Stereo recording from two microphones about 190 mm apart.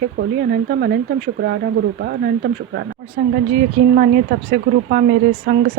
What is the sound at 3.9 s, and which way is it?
Speech, 55° right (ahead or behind).